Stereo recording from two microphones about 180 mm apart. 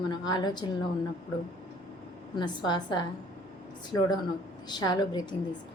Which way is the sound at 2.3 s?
25° left (ahead or behind).